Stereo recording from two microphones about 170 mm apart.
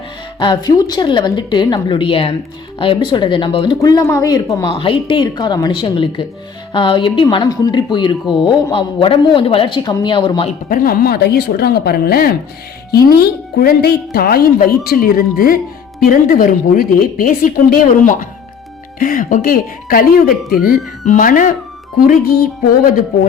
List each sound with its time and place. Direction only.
0.3 s speech: 25° left (ahead or behind)
4.7 s speech: 30° left (ahead or behind)
10.7 s speech: 60° left (ahead or behind)
21.0 s speech: 50° left (ahead or behind)